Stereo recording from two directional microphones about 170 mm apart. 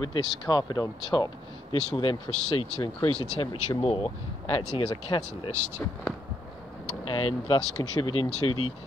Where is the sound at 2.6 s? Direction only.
30° left (ahead or behind).